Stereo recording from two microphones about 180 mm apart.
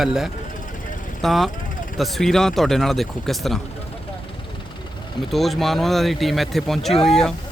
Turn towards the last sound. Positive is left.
turn(degrees=5)  # may be behind; listen again after turning